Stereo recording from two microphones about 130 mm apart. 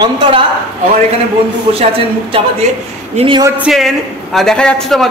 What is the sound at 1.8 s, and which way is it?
A woman's voice, 45° right (ahead or behind).